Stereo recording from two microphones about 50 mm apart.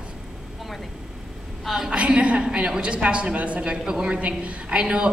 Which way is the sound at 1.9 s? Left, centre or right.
Right.